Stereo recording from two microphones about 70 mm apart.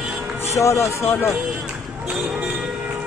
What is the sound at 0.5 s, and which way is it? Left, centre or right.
Speech, left.